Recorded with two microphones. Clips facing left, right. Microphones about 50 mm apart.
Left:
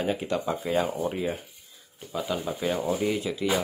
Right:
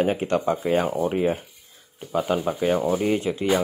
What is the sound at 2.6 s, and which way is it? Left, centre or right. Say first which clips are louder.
Speech: right 5 dB; right.